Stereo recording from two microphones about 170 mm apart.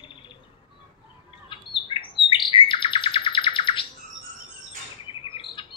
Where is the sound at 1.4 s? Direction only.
30° left (ahead or behind).